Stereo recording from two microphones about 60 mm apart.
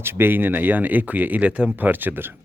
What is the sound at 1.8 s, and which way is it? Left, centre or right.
Speech, right.